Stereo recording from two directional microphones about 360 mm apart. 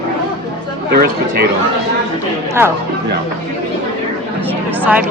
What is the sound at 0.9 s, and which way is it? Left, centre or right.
Speech, right.